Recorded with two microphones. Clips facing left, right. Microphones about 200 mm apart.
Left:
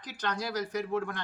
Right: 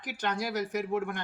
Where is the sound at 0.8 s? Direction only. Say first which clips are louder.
Right 1 dB; 15° right (ahead or behind).